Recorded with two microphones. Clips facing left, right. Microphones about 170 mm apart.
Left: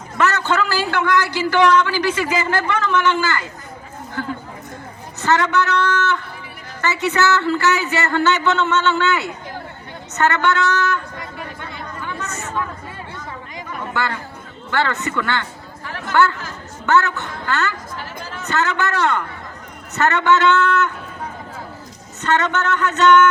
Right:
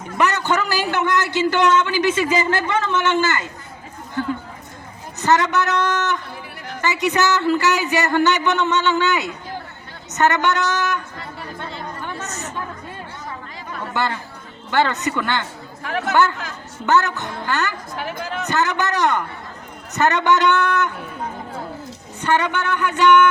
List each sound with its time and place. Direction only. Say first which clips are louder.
0.3 s a man's voice: left 1 dB; 15° right (ahead or behind)
5.2 s speech: even; 20° right (ahead or behind)
13.9 s speech: right 1 dB; 20° right (ahead or behind)
15.8 s chatter: right 7 dB; 65° right (ahead or behind)
16.8 s speech: left 1 dB; 20° right (ahead or behind)
22.2 s speech: left 1 dB; 10° right (ahead or behind)